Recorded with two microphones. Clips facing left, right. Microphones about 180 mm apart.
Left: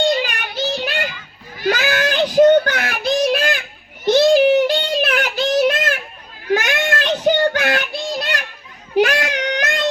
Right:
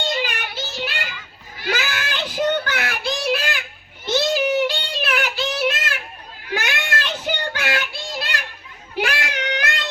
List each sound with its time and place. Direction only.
0.1 s child singing: 45° left (ahead or behind)
0.9 s children playing: 50° left (ahead or behind)
1.6 s child singing: 50° left (ahead or behind)
4.1 s a sound: 45° left (ahead or behind)
6.5 s child singing: 50° left (ahead or behind)